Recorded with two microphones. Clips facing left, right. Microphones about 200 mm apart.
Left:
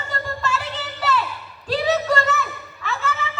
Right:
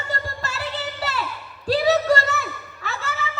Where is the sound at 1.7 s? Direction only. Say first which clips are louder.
Right 2 dB; 40° right (ahead or behind).